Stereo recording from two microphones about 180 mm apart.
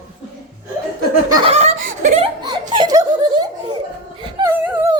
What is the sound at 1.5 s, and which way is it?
Laughter, 40° right (ahead or behind).